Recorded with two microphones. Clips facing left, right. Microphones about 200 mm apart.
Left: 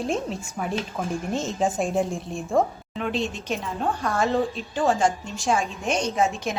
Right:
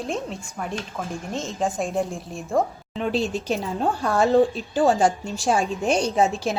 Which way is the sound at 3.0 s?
35° right (ahead or behind).